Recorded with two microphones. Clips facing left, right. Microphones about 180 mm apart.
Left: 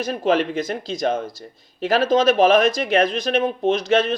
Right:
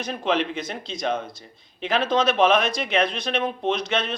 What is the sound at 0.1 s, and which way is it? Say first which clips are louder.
Speech: left 4 dB; 50° left (ahead or behind).